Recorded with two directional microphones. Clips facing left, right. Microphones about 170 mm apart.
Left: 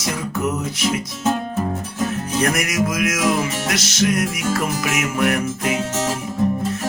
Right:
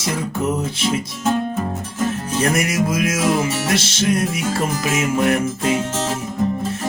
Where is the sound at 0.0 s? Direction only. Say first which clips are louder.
Right 1 dB; 30° right (ahead or behind).